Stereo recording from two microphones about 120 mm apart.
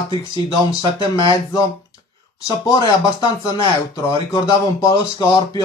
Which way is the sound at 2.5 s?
35° left (ahead or behind).